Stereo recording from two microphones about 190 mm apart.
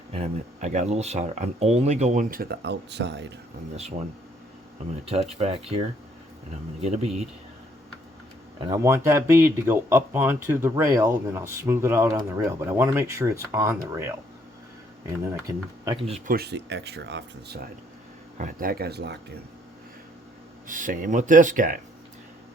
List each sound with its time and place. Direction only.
0.1 s speech: 40° right (ahead or behind); by 3.3 s 65° right (ahead or behind)
5.0 s speech: 35° right (ahead or behind)
6.8 s speech: 35° right (ahead or behind)
8.6 s speech: 15° right (ahead or behind)
15.8 s speech: 20° right (ahead or behind)
16.0 s speech: 35° right (ahead or behind)
16.3 s speech: 60° right (ahead or behind)
18.3 s speech: 45° right (ahead or behind)
20.7 s speech: 45° right (ahead or behind)